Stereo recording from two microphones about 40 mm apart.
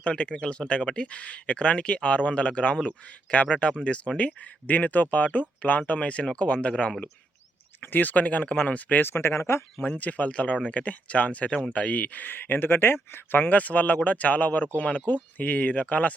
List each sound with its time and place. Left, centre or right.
0.0 s speech: left
4.6 s speech: left
7.8 s speech: left
9.0 s speech: left
9.8 s speech: left
13.5 s speech: left